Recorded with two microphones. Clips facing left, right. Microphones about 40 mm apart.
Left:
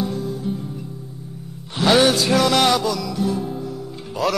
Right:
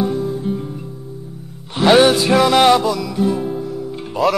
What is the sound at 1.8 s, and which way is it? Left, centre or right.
Music, right.